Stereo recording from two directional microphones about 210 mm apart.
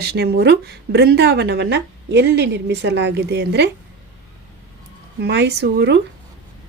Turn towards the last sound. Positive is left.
turn(degrees=-55)  # may be behind; listen again after turning